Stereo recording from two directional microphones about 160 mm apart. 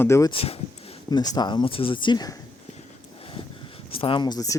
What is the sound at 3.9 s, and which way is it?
Speech, 35° left (ahead or behind).